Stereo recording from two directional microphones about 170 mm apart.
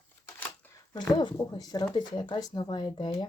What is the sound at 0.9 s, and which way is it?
Speech, 25° left (ahead or behind).